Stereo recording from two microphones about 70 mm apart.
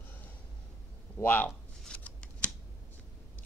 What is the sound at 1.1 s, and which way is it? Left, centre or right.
Speech, left.